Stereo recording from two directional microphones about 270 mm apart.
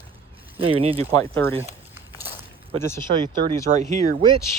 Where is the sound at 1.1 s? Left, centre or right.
Centre.